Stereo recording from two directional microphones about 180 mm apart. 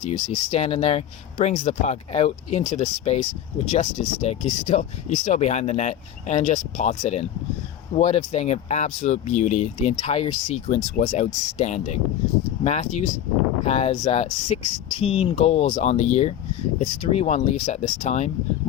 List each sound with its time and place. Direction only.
0.0 s speech: 35° left (ahead or behind)